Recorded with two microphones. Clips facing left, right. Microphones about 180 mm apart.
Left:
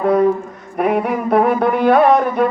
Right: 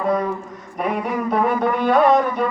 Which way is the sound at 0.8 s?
60° left (ahead or behind).